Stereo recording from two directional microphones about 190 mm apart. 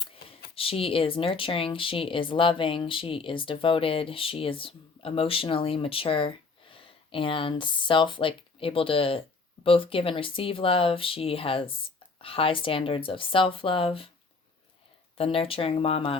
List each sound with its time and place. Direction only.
0.2 s a sound: 55° left (ahead or behind)
0.5 s speech: 30° left (ahead or behind)
15.2 s speech: 30° left (ahead or behind)